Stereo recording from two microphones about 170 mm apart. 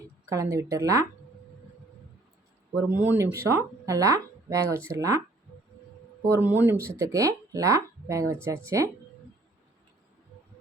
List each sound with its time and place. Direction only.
0.3 s a woman's voice: 20° right (ahead or behind)
2.9 s speech: 10° right (ahead or behind)
6.2 s speech: 15° right (ahead or behind)